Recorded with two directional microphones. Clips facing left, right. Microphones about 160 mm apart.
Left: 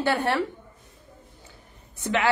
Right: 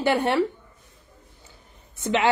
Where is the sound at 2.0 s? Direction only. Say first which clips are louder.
Right 2 dB; 20° right (ahead or behind).